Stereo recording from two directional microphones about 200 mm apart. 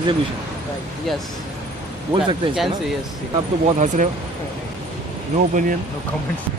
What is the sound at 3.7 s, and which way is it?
Speech, 35° right (ahead or behind).